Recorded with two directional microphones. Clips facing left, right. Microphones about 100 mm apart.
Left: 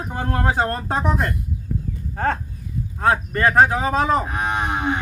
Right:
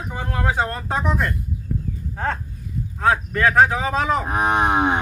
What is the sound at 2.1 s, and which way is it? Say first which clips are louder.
Speech: left 3 dB; 55° left (ahead or behind).